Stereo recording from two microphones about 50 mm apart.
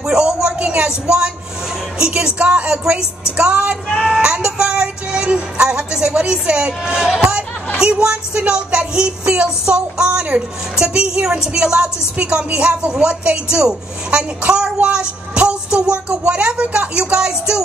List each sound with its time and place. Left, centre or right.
0.0 s a sound: centre
2.0 s a woman's voice: centre
4.0 s music: centre
7.8 s a woman's voice: centre